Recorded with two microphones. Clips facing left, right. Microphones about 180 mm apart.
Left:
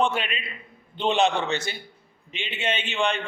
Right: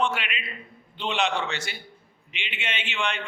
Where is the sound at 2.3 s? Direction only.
40° left (ahead or behind).